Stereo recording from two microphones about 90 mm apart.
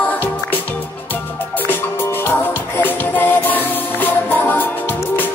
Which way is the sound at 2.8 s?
20° left (ahead or behind).